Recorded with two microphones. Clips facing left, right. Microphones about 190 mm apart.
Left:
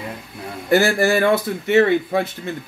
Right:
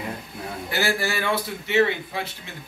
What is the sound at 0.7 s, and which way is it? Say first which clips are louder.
A man's voice: left 10 dB; 45° left (ahead or behind).